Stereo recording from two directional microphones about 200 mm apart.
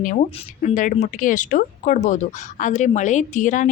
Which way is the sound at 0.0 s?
40° left (ahead or behind).